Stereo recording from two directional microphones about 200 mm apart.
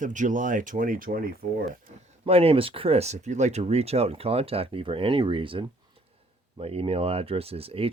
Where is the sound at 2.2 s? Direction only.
30° right (ahead or behind).